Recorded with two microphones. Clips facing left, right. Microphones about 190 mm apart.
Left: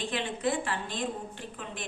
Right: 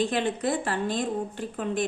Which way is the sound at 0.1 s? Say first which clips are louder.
Right 4 dB; 40° right (ahead or behind).